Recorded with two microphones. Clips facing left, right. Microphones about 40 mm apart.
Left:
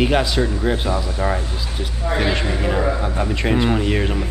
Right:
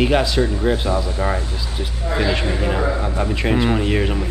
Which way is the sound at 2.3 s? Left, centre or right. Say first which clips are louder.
Even; centre.